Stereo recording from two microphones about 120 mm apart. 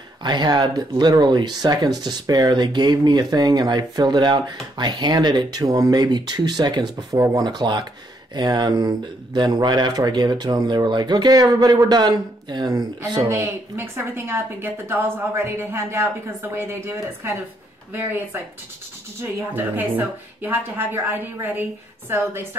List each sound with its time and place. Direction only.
0.2 s speech: 35° right (ahead or behind)
7.2 s a woman's voice: 20° right (ahead or behind)
7.4 s speech: 40° right (ahead or behind)
13.3 s a woman's voice: 20° right (ahead or behind)
19.5 s a woman's voice: 15° right (ahead or behind)